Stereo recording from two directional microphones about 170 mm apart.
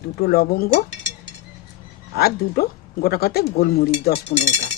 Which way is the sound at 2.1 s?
65° left (ahead or behind).